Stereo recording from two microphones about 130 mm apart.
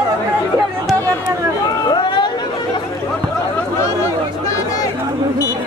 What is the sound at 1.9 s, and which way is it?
Chatter, 35° left (ahead or behind).